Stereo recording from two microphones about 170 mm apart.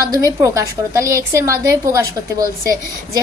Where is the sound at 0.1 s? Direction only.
20° right (ahead or behind).